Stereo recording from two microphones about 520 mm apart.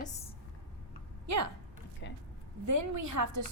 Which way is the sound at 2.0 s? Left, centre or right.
Left.